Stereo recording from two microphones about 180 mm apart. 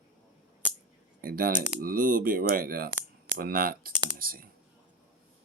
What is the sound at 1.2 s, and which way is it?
Speech, 55° right (ahead or behind).